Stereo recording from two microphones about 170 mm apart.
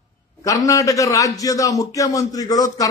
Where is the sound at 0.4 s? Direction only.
20° left (ahead or behind).